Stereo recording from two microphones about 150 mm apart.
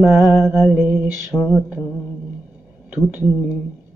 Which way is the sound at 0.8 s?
10° right (ahead or behind).